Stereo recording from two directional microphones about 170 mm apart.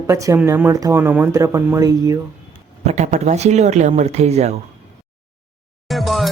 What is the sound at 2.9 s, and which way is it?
Speech, 45° right (ahead or behind).